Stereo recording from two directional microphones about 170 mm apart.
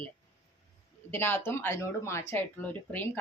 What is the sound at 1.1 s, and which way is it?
Speech, 10° left (ahead or behind).